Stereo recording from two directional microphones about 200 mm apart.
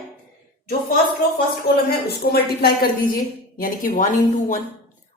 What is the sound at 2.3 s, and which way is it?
A woman's voice, 50° left (ahead or behind).